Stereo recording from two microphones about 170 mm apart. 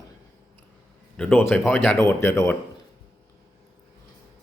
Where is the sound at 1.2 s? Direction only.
10° left (ahead or behind).